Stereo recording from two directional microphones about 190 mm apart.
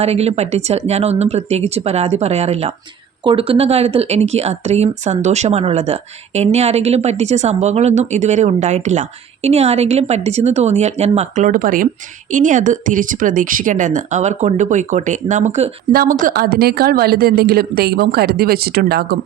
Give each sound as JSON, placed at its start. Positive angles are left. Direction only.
{"t": 0.0, "sound": "a woman's voice", "side_deg": -35}